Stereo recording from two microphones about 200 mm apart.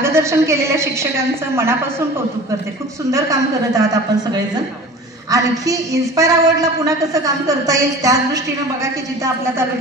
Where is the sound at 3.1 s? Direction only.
15° right (ahead or behind).